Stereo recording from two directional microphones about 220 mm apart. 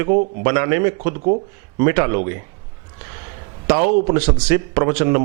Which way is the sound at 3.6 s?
15° right (ahead or behind).